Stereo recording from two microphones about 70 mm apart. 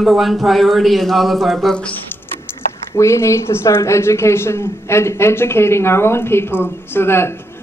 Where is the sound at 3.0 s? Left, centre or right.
Left.